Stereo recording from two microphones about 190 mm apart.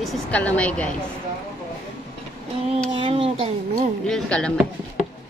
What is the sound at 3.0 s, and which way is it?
Speech, 30° right (ahead or behind).